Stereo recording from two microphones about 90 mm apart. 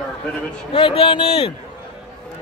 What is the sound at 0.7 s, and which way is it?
Speech, 80° left.